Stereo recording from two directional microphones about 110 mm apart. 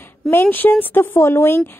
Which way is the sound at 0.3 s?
20° left (ahead or behind).